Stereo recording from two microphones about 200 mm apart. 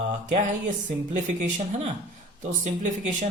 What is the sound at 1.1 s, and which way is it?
A man's voice, 40° right (ahead or behind).